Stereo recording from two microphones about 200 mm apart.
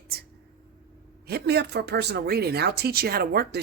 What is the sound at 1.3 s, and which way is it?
A woman's voice, 55° right (ahead or behind).